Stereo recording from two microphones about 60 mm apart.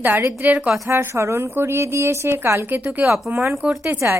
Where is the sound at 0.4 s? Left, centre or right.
Right.